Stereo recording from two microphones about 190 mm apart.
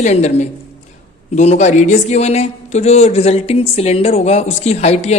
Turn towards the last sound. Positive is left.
turn(degrees=35)  # may be behind; listen again after turning